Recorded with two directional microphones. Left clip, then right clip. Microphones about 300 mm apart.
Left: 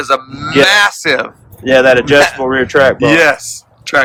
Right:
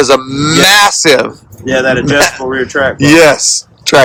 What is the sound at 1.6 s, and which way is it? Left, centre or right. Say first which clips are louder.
Speech: left 3 dB; left.